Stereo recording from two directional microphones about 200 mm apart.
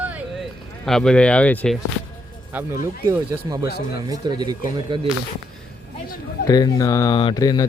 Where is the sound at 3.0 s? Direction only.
20° right (ahead or behind).